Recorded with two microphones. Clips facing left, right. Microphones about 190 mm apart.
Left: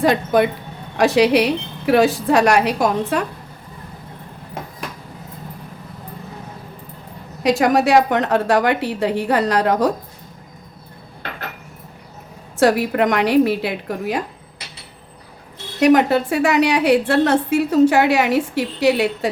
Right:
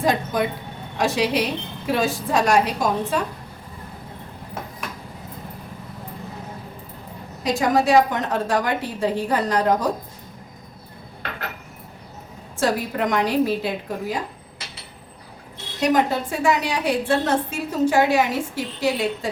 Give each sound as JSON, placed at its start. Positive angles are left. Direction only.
{"t": 0.0, "sound": "a woman's voice", "side_deg": 70}
{"t": 7.4, "sound": "a woman's voice", "side_deg": 70}
{"t": 12.5, "sound": "a woman's voice", "side_deg": 70}
{"t": 15.8, "sound": "a woman's voice", "side_deg": 70}